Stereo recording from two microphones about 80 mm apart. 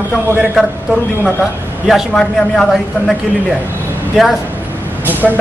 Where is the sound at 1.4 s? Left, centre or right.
Centre.